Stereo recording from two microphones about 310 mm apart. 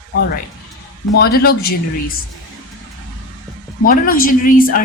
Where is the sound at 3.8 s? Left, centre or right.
Left.